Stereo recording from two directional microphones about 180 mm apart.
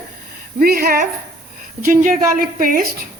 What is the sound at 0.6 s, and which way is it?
A woman's voice, 55° right (ahead or behind).